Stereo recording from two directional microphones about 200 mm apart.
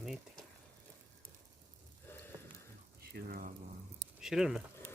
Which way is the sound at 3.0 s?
50° right (ahead or behind).